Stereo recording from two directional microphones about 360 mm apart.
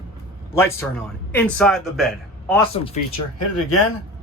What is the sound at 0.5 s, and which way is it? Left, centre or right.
Speech, centre.